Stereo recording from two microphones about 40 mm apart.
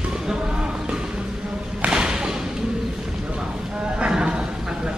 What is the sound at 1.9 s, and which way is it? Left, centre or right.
Music, centre.